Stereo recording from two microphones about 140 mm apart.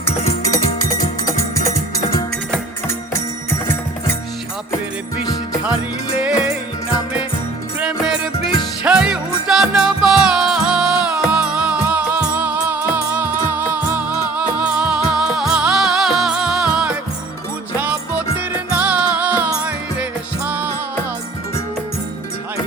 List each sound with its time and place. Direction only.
0.6 s music: 65° left (ahead or behind)
7.8 s music: 5° right (ahead or behind)